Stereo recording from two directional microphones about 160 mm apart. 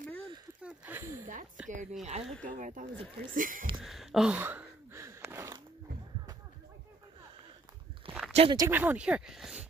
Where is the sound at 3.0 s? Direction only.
35° right (ahead or behind).